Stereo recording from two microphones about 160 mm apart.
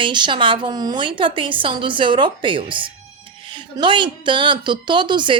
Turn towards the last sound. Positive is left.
turn(degrees=-30)  # may be behind; listen again after turning